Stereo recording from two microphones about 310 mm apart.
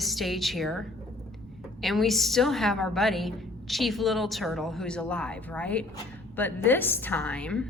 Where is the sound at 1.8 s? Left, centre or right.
Centre.